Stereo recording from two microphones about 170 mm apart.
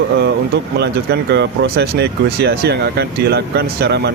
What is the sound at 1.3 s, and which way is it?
Speech, 80° right.